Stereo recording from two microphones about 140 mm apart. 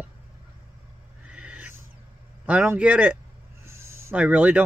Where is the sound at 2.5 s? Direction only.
10° right (ahead or behind).